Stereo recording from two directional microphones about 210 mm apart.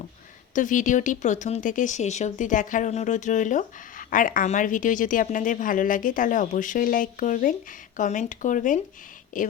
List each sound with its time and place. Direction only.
0.5 s speech: 35° left (ahead or behind)